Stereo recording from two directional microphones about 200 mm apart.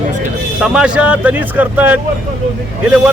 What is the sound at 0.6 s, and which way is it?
A man's voice, 5° right (ahead or behind).